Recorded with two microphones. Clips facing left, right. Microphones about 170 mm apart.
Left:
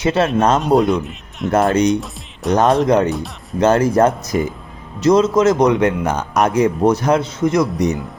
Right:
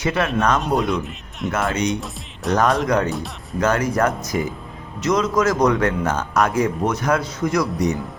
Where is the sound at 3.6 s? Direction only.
30° left (ahead or behind).